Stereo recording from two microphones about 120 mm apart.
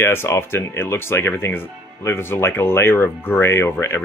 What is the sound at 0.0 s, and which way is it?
Speech, 20° left (ahead or behind).